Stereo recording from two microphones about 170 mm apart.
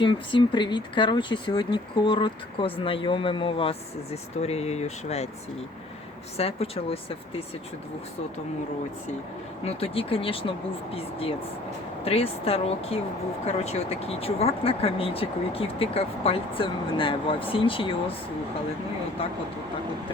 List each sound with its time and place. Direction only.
0.0 s speech: 30° left (ahead or behind)
9.6 s speech: 35° left (ahead or behind)